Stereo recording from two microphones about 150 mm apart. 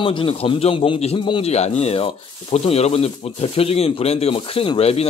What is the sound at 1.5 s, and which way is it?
A man's voice, 45° left (ahead or behind).